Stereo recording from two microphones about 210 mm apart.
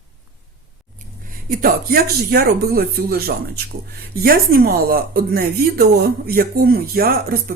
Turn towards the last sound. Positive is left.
turn(degrees=-45)  # may be behind; listen again after turning